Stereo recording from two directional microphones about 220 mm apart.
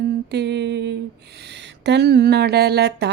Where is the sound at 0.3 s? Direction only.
50° right (ahead or behind).